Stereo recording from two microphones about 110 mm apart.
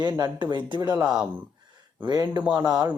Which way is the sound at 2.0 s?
40° right (ahead or behind).